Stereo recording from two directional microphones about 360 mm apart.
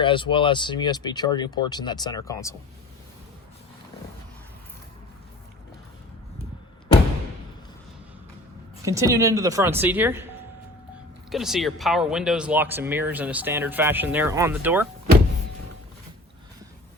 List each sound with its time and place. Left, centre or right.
0.0 s speech: centre
6.4 s door: centre
8.8 s a woman's voice: centre
11.3 s speech: centre